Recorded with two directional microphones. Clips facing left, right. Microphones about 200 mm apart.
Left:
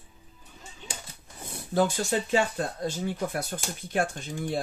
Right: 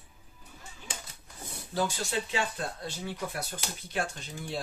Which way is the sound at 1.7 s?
50° left (ahead or behind).